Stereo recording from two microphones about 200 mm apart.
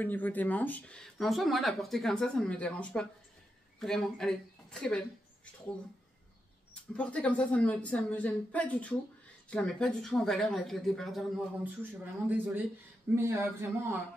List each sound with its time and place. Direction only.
0.0 s a woman's voice: 10° left (ahead or behind)
6.7 s a woman's voice: 5° left (ahead or behind); by 13.7 s 15° right (ahead or behind)